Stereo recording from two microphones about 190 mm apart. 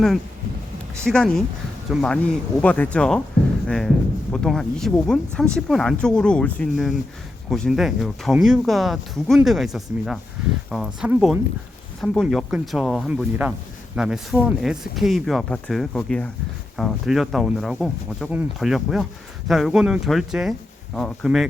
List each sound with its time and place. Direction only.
1.0 s speech: 5° left (ahead or behind)
4.3 s speech: centre (ahead or behind)